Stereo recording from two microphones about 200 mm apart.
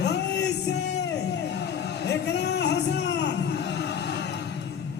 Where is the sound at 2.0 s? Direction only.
60° left (ahead or behind).